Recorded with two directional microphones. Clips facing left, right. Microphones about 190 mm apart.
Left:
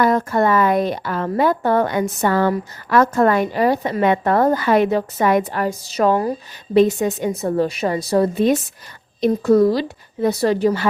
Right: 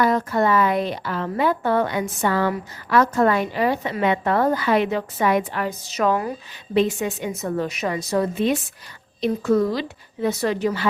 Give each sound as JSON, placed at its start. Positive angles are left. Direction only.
{"t": 0.0, "sound": "a woman's voice", "side_deg": 50}